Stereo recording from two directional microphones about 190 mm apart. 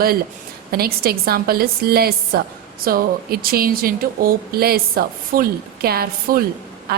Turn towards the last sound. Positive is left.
turn(degrees=-55)  # may be behind; listen again after turning